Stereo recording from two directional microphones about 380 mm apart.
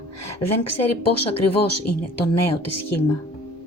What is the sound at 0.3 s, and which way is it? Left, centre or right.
Speech, left.